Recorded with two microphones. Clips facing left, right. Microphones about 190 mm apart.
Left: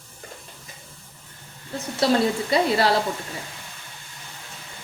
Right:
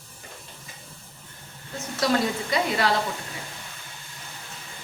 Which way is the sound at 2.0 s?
30° left (ahead or behind).